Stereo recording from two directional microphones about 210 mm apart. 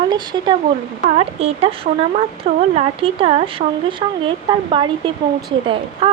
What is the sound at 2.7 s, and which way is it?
Speech, 25° right (ahead or behind).